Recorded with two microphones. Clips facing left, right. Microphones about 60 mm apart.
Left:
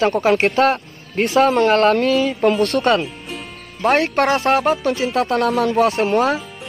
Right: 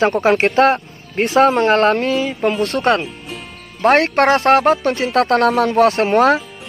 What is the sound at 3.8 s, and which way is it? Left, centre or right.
Speech, right.